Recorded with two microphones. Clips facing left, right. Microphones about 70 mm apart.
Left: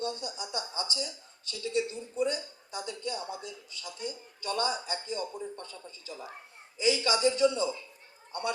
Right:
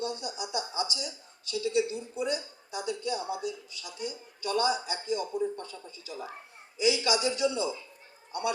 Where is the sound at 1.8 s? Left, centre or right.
Centre.